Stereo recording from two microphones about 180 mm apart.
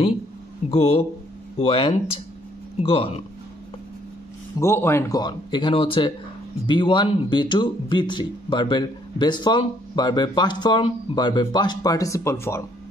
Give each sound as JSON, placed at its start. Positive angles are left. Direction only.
{"t": 0.7, "sound": "speech", "side_deg": 35}
{"t": 4.6, "sound": "speech", "side_deg": 15}